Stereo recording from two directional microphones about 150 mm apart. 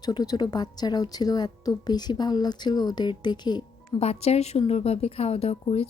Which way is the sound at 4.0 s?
45° left (ahead or behind).